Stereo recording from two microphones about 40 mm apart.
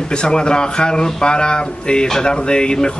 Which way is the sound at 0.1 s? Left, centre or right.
Left.